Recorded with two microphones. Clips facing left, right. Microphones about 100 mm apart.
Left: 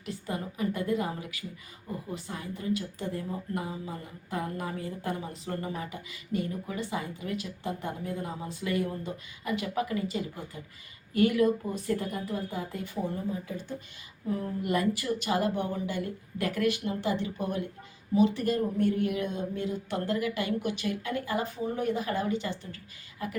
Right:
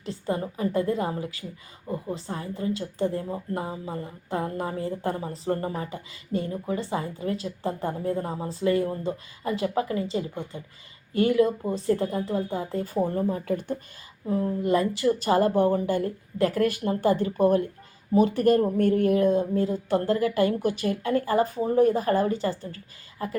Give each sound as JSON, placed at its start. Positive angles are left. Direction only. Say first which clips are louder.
{"t": 0.0, "sound": "a woman's voice", "louder": "right 6 dB", "side_deg": -30}
{"t": 13.1, "sound": "speech", "louder": "right 8 dB", "side_deg": -60}
{"t": 14.3, "sound": "a woman's voice", "louder": "right 6 dB", "side_deg": -25}